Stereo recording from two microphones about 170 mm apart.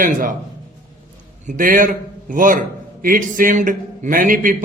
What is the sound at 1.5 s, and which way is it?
A man's voice, 50° right (ahead or behind).